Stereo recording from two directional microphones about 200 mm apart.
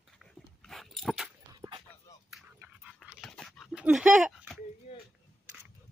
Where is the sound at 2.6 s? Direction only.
Centre (ahead or behind).